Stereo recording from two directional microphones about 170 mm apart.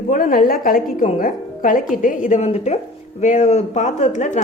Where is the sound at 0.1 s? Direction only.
55° left (ahead or behind).